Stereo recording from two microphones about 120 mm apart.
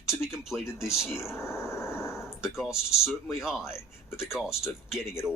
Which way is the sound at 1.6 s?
20° left (ahead or behind).